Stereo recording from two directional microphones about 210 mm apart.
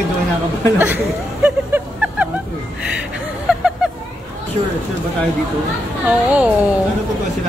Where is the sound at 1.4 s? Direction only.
5° right (ahead or behind).